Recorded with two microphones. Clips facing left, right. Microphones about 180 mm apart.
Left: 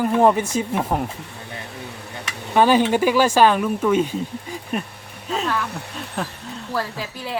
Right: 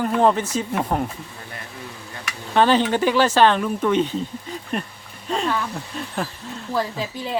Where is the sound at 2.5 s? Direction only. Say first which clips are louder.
Left 1 dB; 10° left (ahead or behind).